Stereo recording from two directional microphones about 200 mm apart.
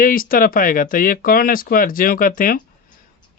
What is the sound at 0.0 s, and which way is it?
A man's voice, 45° left (ahead or behind).